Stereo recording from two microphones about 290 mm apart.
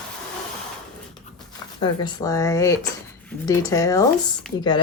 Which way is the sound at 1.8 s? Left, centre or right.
Centre.